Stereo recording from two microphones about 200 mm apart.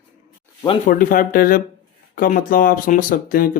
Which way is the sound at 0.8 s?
45° left (ahead or behind).